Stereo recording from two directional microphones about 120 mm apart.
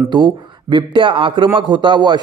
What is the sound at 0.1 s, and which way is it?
A man's voice, 40° right (ahead or behind).